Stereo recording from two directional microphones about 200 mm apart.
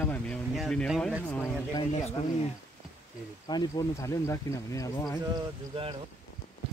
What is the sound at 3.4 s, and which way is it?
Speech, 20° left (ahead or behind).